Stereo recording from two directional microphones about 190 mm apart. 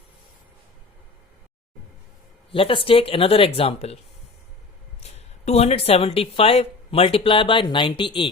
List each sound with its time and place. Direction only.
2.5 s speech: 30° left (ahead or behind)
5.5 s speech: 35° left (ahead or behind)